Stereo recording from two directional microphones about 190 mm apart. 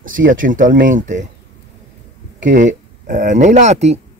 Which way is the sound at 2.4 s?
40° right (ahead or behind).